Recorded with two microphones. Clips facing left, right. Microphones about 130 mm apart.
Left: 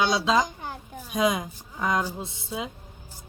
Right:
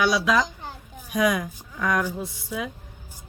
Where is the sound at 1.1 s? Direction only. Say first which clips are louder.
Right 2 dB; 25° left (ahead or behind).